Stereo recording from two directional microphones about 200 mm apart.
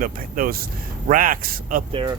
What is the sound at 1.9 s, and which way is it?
Speech, 25° right (ahead or behind).